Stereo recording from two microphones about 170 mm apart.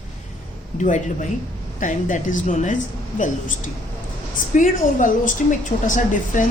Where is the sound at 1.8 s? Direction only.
50° left (ahead or behind).